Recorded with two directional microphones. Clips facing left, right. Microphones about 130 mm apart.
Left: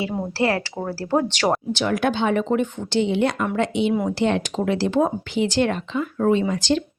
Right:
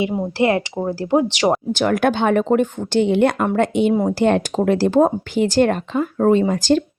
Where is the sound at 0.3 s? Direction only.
20° right (ahead or behind).